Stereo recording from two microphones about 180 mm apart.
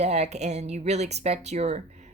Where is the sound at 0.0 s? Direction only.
40° right (ahead or behind).